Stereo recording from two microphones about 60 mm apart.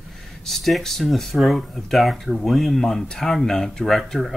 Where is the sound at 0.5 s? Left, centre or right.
Centre.